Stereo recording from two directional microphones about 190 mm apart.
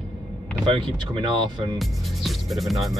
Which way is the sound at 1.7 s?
Centre (ahead or behind).